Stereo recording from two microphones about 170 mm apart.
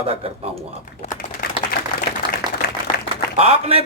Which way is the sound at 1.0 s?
50° left (ahead or behind).